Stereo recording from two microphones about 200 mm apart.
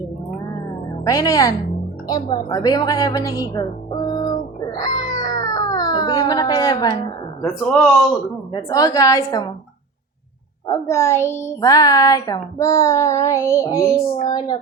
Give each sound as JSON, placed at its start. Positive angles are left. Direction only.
{"t": 1.0, "sound": "a child's voice", "side_deg": 15}
{"t": 4.7, "sound": "music", "side_deg": 20}
{"t": 7.4, "sound": "speech", "side_deg": 5}
{"t": 8.5, "sound": "a child's voice", "side_deg": 15}
{"t": 10.7, "sound": "a child's voice", "side_deg": 15}